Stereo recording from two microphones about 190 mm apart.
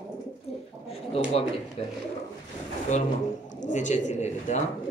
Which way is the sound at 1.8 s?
30° left (ahead or behind).